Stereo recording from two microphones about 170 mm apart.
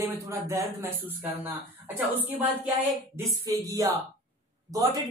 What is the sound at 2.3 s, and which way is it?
A woman's voice, 10° right (ahead or behind).